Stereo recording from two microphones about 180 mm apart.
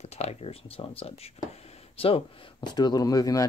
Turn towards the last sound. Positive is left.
turn(degrees=20)  # may be behind; listen again after turning